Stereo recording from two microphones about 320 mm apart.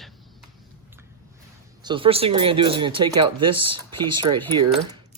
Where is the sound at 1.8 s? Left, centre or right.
Centre.